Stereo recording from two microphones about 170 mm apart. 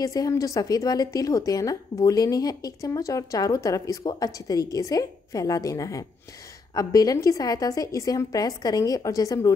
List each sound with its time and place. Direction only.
0.0 s speech: 20° left (ahead or behind)